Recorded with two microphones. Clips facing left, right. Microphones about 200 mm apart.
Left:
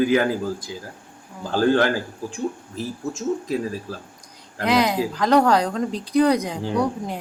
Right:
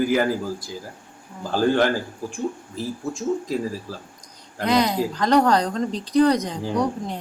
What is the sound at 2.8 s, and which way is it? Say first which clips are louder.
Speech: even; 15° left (ahead or behind).